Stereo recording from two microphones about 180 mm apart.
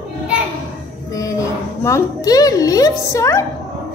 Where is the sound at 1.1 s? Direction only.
20° left (ahead or behind).